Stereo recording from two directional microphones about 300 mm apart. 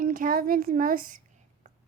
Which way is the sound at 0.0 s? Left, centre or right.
Right.